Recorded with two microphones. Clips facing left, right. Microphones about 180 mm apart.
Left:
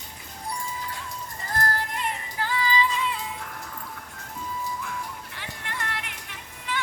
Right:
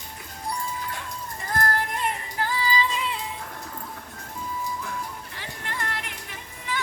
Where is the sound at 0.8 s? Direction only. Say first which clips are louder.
Right 2 dB; 60° right (ahead or behind).